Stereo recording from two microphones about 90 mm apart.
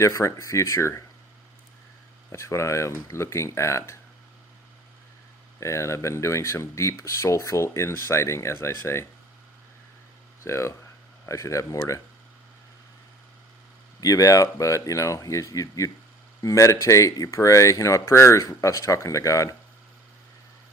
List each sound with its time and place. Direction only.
0.0 s speech: 35° left (ahead or behind)
2.3 s speech: 30° left (ahead or behind)
5.5 s speech: 35° left (ahead or behind)
10.4 s speech: 30° left (ahead or behind)
14.0 s speech: 40° left (ahead or behind)